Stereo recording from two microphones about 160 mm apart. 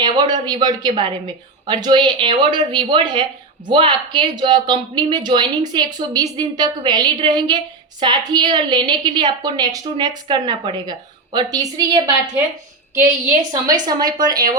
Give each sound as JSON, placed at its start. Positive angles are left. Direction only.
{"t": 0.0, "sound": "a sound", "side_deg": -25}
{"t": 0.4, "sound": "a woman's voice", "side_deg": -25}
{"t": 13.7, "sound": "a woman's voice", "side_deg": -25}